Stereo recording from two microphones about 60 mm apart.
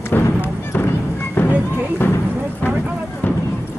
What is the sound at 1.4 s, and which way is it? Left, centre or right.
Music, left.